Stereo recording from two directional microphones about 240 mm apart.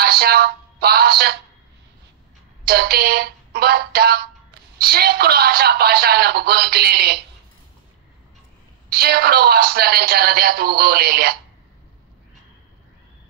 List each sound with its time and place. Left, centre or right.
0.0 s speech: right
2.6 s a man's voice: right
8.9 s a man's voice: right